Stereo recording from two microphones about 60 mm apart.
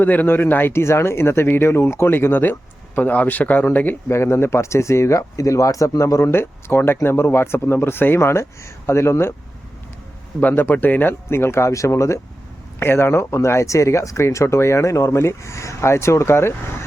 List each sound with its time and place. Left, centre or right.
0.0 s speech: left
4.1 s speech: left
6.3 s speech: left
10.5 s speech: left
11.3 s speech: left
12.8 s speech: left